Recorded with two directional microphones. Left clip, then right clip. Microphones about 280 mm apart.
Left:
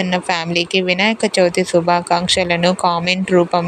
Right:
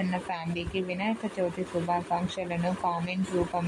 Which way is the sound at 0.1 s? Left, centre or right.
Left.